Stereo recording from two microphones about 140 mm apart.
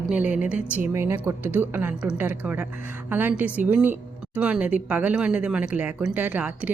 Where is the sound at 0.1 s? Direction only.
10° right (ahead or behind).